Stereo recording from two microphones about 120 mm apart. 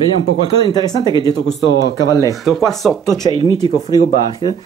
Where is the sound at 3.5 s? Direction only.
30° left (ahead or behind).